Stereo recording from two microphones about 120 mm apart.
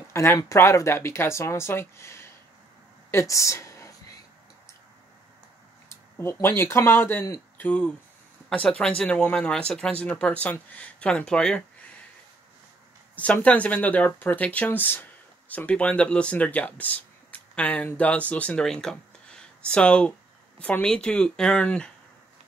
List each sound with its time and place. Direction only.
0.1 s speech: 20° left (ahead or behind)
5.9 s speech: 20° left (ahead or behind)
13.1 s speech: 10° left (ahead or behind)